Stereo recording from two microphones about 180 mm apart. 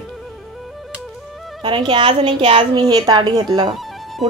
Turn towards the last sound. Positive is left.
turn(degrees=0)  # may be behind; listen again after turning